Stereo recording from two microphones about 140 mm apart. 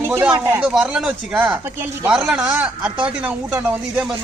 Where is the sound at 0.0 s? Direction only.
10° right (ahead or behind).